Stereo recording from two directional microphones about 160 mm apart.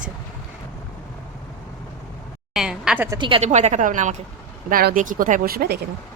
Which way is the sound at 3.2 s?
30° right (ahead or behind).